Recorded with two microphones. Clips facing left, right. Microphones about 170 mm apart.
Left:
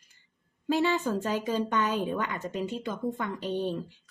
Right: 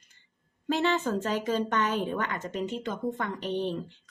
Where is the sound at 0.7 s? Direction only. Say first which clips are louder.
Even; 10° left (ahead or behind).